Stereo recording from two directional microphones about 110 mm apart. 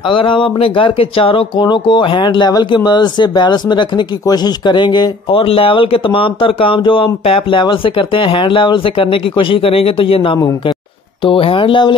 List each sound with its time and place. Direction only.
0.1 s speech: 50° left (ahead or behind)
1.6 s speech: 45° left (ahead or behind)
5.3 s speech: 60° left (ahead or behind)